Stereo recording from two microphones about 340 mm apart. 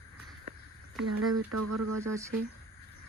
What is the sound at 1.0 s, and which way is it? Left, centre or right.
Speech, right.